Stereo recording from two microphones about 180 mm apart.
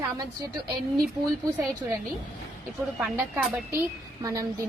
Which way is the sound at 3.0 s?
5° right (ahead or behind).